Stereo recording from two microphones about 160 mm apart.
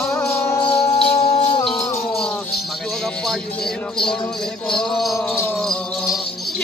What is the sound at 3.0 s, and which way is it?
Music, centre (ahead or behind).